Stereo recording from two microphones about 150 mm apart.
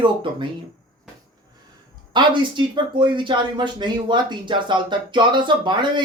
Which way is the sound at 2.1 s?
30° right (ahead or behind).